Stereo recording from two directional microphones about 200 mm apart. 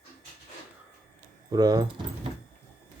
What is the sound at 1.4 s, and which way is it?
Speech, 20° right (ahead or behind).